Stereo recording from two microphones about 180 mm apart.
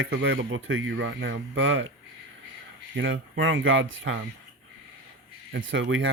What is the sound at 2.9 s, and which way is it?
Speech, 90° right.